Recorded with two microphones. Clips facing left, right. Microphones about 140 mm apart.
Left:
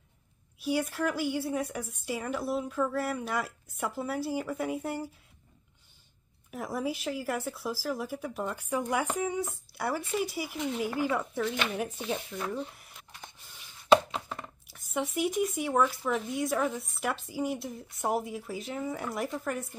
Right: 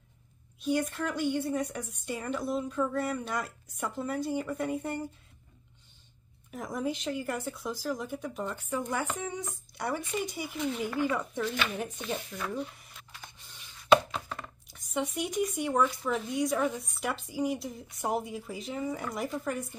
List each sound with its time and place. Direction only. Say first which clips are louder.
0.6 s a woman's voice: even; 5° left (ahead or behind)
6.5 s a woman's voice: even; 5° left (ahead or behind)
11.4 s speech: left 1 dB; 25° left (ahead or behind)
12.3 s a woman's voice: left 2 dB; centre (ahead or behind)
13.8 s chopping: left 1 dB; 20° left (ahead or behind)
14.7 s a woman's voice: even; centre (ahead or behind)